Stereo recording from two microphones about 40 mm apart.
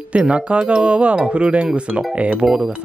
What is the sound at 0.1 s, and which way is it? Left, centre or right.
Speech, right.